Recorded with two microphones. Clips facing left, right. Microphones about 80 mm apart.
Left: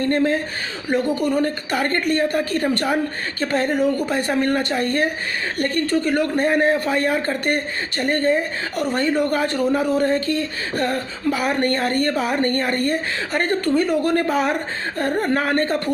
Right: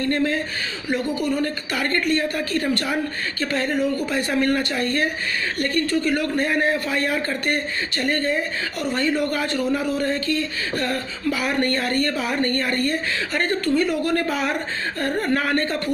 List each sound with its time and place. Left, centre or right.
0.0 s speech: left
0.8 s speech: left